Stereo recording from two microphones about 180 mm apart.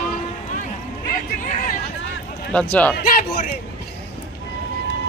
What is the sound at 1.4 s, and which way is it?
Hubbub, 45° left (ahead or behind).